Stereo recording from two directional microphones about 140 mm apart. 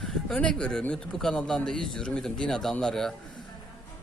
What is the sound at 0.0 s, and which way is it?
Speech, centre (ahead or behind).